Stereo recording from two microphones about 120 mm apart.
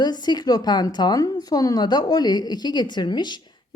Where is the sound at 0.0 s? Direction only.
35° left (ahead or behind).